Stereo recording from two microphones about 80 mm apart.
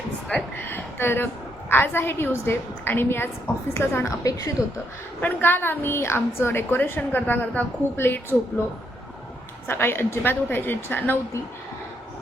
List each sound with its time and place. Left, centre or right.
0.6 s a sound: left
1.7 s a woman's voice: left
5.2 s a woman's voice: left
9.6 s a woman's voice: left